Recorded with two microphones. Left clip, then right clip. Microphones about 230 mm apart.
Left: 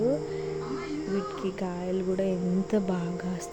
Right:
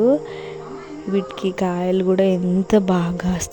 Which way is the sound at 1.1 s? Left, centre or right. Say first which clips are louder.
Right 12 dB; right.